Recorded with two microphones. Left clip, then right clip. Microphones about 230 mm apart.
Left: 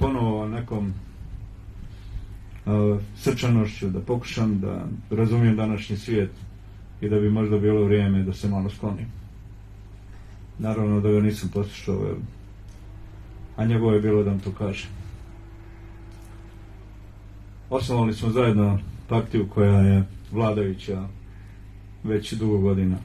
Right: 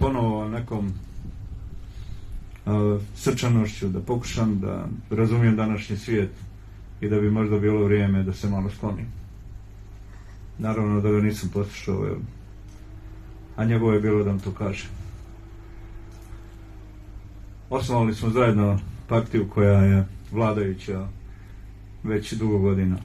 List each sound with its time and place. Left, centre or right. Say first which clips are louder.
0.0 s a sound: right 1 dB; right
2.6 s speech: left 1 dB; right
10.6 s speech: even; centre
13.6 s speech: even; centre
17.6 s speech: even; centre
22.0 s speech: left 1 dB; centre